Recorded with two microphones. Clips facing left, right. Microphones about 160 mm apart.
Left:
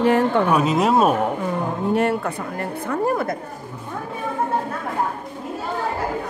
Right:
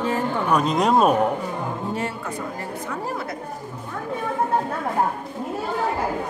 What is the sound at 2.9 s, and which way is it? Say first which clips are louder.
Speech: left 10 dB; 50° left (ahead or behind).